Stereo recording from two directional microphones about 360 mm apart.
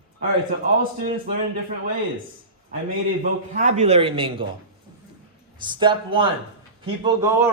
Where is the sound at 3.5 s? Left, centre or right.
Centre.